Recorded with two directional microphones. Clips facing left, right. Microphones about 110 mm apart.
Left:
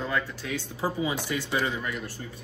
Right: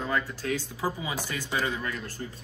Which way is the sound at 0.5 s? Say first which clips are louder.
Left 2 dB; 20° left (ahead or behind).